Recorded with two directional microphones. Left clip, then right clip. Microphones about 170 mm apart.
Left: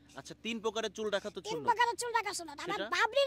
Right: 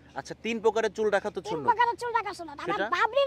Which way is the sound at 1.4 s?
30° left (ahead or behind).